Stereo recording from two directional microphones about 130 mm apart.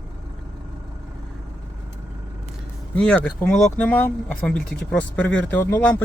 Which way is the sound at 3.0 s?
10° left (ahead or behind).